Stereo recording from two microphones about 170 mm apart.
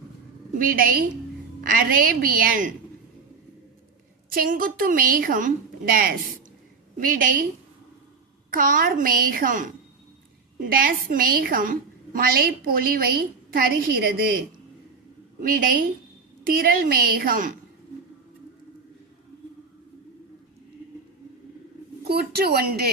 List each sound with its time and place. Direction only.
0.6 s a woman's voice: 55° right (ahead or behind)
4.3 s a woman's voice: 55° right (ahead or behind)
8.4 s a woman's voice: 55° right (ahead or behind)
15.4 s a woman's voice: 55° right (ahead or behind)
22.1 s speech: 70° right (ahead or behind)